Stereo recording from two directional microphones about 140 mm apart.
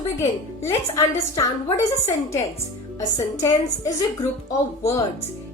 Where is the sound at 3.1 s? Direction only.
20° left (ahead or behind).